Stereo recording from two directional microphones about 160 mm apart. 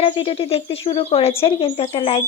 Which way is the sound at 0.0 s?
35° left (ahead or behind).